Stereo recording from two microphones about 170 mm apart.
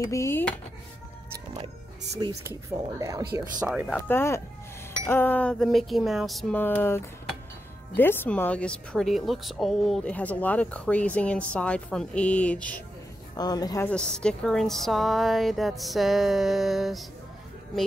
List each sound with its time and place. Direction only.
0.0 s speech: 15° left (ahead or behind)
2.1 s speech: 25° right (ahead or behind)
3.8 s a woman's voice: 10° left (ahead or behind)
6.6 s speech: 10° left (ahead or behind)
13.4 s a woman's voice: 20° left (ahead or behind)
13.8 s a woman's voice: 5° left (ahead or behind)